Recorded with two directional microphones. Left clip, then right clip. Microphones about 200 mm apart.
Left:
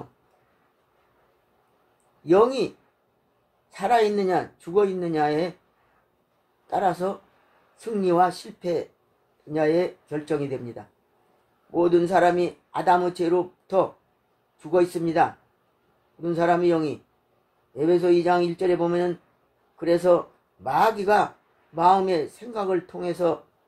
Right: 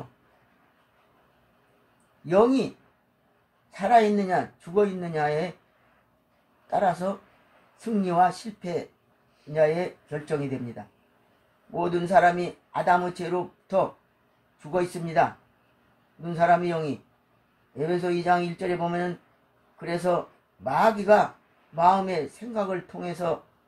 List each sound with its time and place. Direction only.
2.2 s speech: 50° left (ahead or behind)
3.7 s speech: 55° left (ahead or behind)
6.7 s speech: 50° left (ahead or behind)
11.7 s speech: 55° left (ahead or behind)